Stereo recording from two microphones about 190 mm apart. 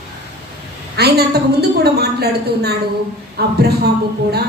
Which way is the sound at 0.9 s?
60° right (ahead or behind).